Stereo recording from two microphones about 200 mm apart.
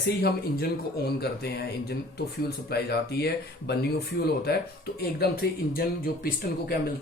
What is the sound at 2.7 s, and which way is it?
Speech, 55° left (ahead or behind).